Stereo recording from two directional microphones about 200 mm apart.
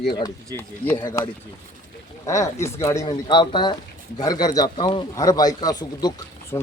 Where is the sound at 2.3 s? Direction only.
15° left (ahead or behind).